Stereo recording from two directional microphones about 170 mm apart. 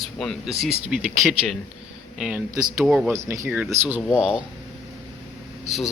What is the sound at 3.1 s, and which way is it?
Speech, 15° right (ahead or behind).